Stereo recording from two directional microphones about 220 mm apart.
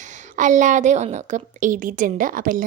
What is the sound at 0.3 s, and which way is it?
A woman's voice, 35° right (ahead or behind).